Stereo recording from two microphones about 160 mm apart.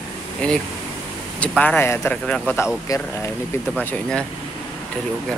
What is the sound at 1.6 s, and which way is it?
Speech, 10° left (ahead or behind).